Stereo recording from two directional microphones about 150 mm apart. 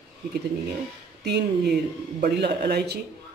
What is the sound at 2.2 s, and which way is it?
Speech, 90° right.